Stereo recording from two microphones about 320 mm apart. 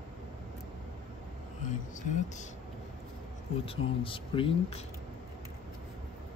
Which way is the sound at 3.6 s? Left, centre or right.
Centre.